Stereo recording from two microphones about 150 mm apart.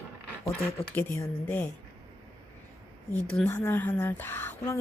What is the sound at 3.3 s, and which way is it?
Speech, 10° left (ahead or behind).